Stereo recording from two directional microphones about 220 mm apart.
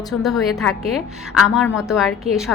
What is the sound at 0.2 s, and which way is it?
A woman's voice, centre (ahead or behind).